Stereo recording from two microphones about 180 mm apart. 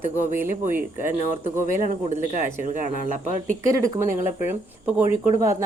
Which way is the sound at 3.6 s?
15° right (ahead or behind).